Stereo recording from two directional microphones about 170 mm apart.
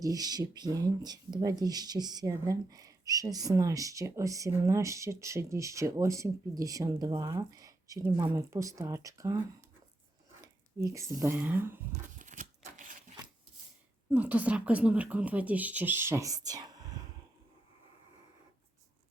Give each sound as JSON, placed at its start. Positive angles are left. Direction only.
{"t": 0.0, "sound": "speech", "side_deg": -20}
{"t": 10.4, "sound": "speech", "side_deg": -20}
{"t": 12.1, "sound": "a sound", "side_deg": -45}
{"t": 14.1, "sound": "speech", "side_deg": -10}